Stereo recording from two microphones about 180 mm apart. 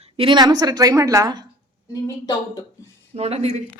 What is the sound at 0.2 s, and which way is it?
A woman's voice, 25° right (ahead or behind).